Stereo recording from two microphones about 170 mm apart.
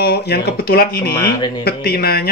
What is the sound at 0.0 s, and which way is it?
Speech, 70° left (ahead or behind).